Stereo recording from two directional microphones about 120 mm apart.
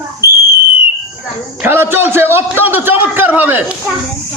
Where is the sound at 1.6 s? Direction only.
15° right (ahead or behind).